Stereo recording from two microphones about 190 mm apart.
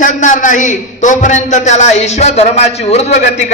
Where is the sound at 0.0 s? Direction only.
40° left (ahead or behind).